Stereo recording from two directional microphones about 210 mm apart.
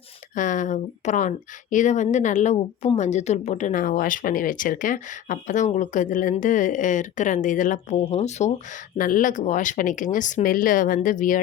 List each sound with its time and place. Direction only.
0.3 s a woman's voice: 35° left (ahead or behind)